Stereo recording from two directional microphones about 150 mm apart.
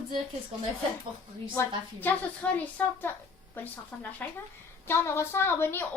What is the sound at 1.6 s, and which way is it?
A woman's voice, 15° left (ahead or behind).